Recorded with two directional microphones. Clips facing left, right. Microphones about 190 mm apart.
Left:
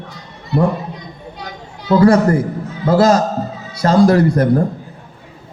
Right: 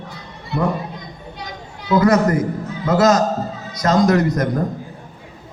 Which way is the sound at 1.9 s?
30° left (ahead or behind).